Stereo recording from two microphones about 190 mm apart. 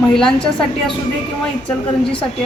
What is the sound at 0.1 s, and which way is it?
Speech, 5° left (ahead or behind).